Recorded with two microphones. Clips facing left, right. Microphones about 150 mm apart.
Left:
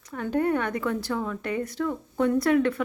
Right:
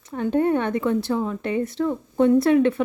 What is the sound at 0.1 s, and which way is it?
Speech, 25° right (ahead or behind).